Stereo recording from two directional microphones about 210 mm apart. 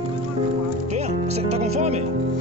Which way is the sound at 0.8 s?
30° right (ahead or behind).